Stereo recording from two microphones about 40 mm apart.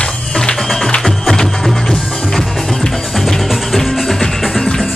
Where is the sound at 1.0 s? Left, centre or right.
Centre.